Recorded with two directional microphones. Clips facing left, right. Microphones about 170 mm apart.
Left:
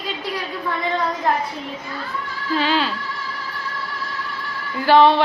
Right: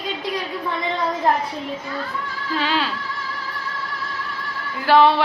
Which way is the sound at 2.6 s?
Centre (ahead or behind).